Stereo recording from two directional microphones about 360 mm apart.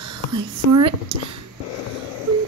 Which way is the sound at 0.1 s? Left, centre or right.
Right.